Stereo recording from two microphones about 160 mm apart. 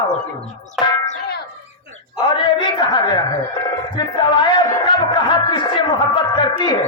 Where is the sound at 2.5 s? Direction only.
30° left (ahead or behind).